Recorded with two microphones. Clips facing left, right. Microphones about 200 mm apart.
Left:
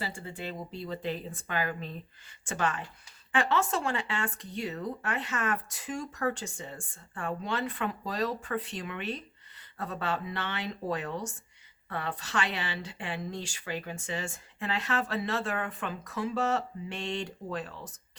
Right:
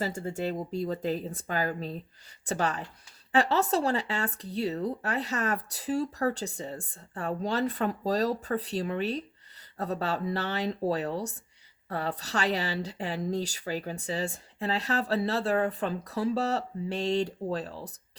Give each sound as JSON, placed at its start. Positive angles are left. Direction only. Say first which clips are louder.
{"t": 0.0, "sound": "speech", "louder": "right 7 dB", "side_deg": -45}